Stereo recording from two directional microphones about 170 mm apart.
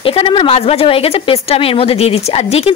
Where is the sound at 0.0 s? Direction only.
30° left (ahead or behind).